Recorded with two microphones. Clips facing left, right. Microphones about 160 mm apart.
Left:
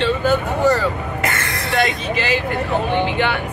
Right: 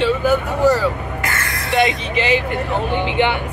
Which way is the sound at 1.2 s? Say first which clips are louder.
Left 3 dB; 25° left (ahead or behind).